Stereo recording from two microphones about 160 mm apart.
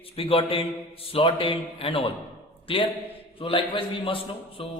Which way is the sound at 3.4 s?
30° left (ahead or behind).